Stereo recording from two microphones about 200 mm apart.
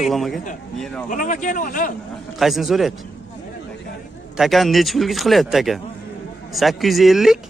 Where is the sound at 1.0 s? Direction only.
40° left (ahead or behind).